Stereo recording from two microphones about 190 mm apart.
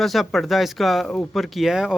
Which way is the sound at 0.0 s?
Centre (ahead or behind).